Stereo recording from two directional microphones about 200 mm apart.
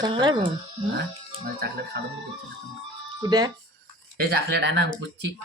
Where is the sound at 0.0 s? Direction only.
20° right (ahead or behind).